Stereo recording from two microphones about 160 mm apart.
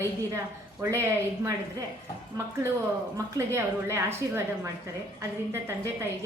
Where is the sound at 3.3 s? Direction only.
15° right (ahead or behind).